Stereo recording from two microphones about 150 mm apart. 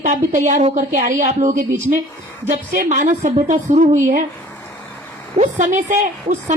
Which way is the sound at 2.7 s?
55° right (ahead or behind).